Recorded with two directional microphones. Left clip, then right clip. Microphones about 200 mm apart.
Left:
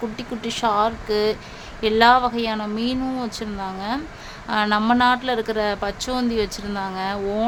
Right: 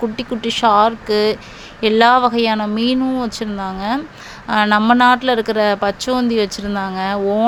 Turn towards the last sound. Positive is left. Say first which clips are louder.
# right 7 dB
turn(degrees=-25)  # may be behind; listen again after turning